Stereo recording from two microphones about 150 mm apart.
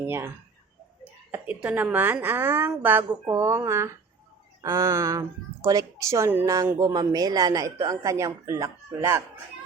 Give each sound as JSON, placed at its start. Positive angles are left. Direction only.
{"t": 1.3, "sound": "a woman's voice", "side_deg": -10}